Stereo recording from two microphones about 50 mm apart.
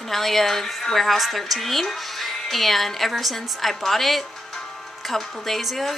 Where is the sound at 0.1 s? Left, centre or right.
Centre.